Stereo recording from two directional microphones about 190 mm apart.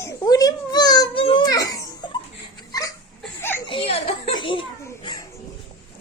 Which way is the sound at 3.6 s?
30° left (ahead or behind).